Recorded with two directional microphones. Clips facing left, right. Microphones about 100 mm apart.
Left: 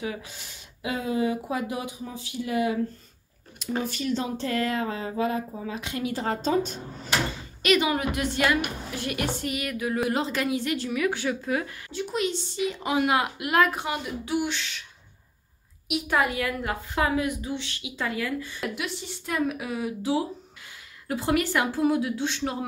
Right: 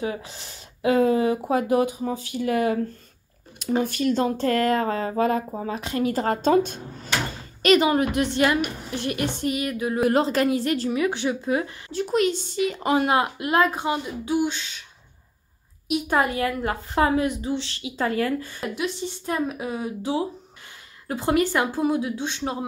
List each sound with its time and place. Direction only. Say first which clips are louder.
0.0 s a woman's voice: right 4 dB; 35° right (ahead or behind)
0.8 s speech: right 7 dB; 50° right (ahead or behind)
3.8 s speech: right 6 dB; 50° right (ahead or behind)
7.6 s a woman's voice: right 5 dB; 35° right (ahead or behind)
10.0 s a woman's voice: right 10 dB; 45° right (ahead or behind)
10.9 s a woman's voice: right 3 dB; 25° right (ahead or behind)
11.9 s speech: right 6 dB; 45° right (ahead or behind)
12.9 s a woman's voice: right 3 dB; 35° right (ahead or behind)
15.9 s a woman's voice: right 3 dB; 35° right (ahead or behind)
18.8 s a woman's voice: right 6 dB; 30° right (ahead or behind)